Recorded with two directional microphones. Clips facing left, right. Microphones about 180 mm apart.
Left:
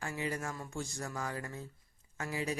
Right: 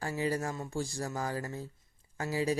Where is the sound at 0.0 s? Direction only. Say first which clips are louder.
Right 5 dB; 35° right (ahead or behind).